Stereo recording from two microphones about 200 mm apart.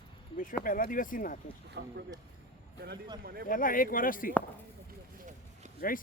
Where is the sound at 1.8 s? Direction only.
55° right (ahead or behind).